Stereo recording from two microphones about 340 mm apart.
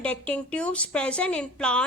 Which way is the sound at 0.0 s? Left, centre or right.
Centre.